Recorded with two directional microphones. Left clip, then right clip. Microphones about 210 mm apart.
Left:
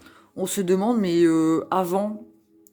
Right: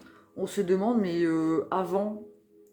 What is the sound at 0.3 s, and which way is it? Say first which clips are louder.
Speech: left 4 dB; 55° left (ahead or behind).